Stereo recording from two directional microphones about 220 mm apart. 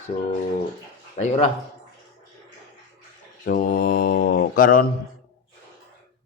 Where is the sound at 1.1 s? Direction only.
30° left (ahead or behind).